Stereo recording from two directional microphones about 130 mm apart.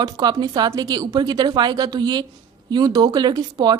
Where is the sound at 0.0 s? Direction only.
30° right (ahead or behind).